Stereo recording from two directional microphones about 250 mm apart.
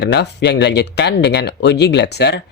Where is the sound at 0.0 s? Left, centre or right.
Left.